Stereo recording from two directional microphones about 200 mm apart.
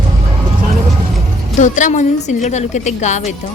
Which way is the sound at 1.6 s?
40° left (ahead or behind).